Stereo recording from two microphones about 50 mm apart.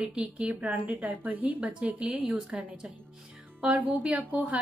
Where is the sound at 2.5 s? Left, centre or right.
Centre.